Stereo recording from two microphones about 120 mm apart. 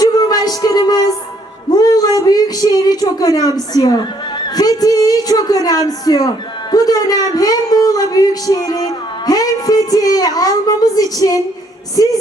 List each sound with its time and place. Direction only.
0.0 s music: 35° left (ahead or behind)
1.7 s a woman's voice: 35° left (ahead or behind)